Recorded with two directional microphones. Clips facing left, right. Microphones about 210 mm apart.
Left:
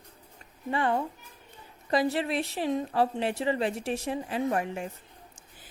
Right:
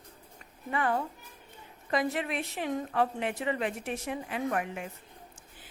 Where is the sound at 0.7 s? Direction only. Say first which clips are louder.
Left 2 dB; 25° left (ahead or behind).